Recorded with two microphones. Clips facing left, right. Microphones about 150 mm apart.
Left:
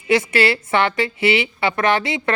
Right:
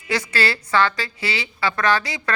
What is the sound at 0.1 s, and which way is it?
Speech, 25° left (ahead or behind).